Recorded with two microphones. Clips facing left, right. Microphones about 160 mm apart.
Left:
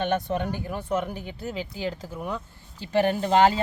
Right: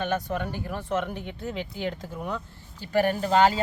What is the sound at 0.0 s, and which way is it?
Speech, 25° left (ahead or behind).